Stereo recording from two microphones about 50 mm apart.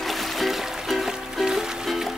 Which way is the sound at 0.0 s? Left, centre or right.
Centre.